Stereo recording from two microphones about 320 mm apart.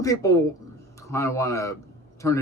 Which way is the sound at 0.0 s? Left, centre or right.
Centre.